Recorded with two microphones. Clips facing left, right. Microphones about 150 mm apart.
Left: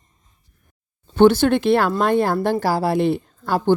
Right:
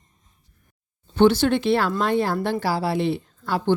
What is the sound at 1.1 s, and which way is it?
A woman's voice, 50° left (ahead or behind).